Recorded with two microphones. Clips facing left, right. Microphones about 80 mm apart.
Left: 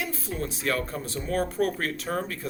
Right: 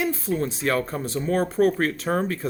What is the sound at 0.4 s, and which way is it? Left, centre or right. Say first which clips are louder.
Speech: right 1 dB; right.